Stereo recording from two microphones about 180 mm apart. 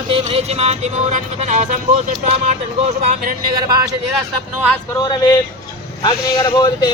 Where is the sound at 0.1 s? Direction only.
35° right (ahead or behind).